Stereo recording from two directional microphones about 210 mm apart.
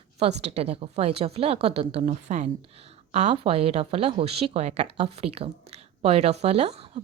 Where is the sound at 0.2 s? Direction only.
30° right (ahead or behind).